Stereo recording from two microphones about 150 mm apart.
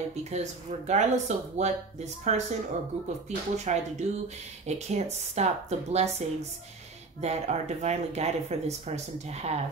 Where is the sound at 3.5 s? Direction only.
50° right (ahead or behind).